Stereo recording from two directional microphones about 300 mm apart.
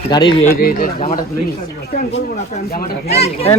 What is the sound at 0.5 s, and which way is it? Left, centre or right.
Speech, left.